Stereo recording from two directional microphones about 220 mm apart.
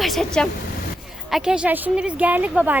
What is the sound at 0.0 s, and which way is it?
A woman's voice, centre (ahead or behind).